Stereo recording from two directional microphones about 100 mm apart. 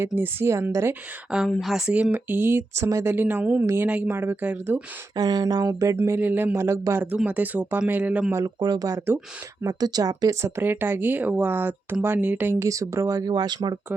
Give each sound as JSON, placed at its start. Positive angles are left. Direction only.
{"t": 0.0, "sound": "speech", "side_deg": -25}
{"t": 1.5, "sound": "speech", "side_deg": 5}
{"t": 1.9, "sound": "speech", "side_deg": -15}
{"t": 5.1, "sound": "speech", "side_deg": -40}
{"t": 6.0, "sound": "speech", "side_deg": -20}
{"t": 8.5, "sound": "speech", "side_deg": -45}
{"t": 12.6, "sound": "speech", "side_deg": -30}